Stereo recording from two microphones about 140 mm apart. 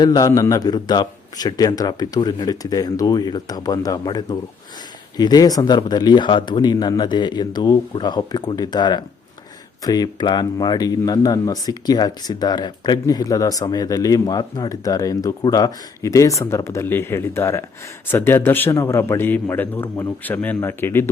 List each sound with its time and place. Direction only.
0.0 s a man's voice: 30° left (ahead or behind)